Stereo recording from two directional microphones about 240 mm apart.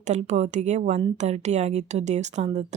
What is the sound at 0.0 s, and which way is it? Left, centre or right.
Speech, right.